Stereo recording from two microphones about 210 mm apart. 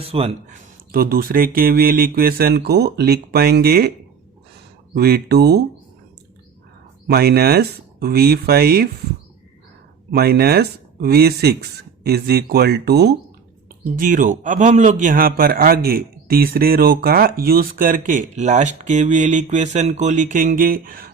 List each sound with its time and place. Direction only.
0.0 s speech: 25° right (ahead or behind)
0.9 s speech: 45° right (ahead or behind)
4.9 s speech: 50° right (ahead or behind)
7.1 s speech: 50° right (ahead or behind)
10.1 s speech: 45° right (ahead or behind)
14.0 s a man's voice: 40° right (ahead or behind)